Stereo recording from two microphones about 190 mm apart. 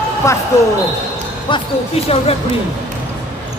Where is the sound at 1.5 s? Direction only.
25° left (ahead or behind).